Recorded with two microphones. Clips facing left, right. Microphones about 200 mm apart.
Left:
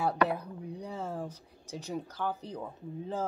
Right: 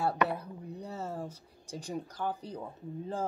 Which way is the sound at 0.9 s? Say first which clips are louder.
Even; 5° right (ahead or behind).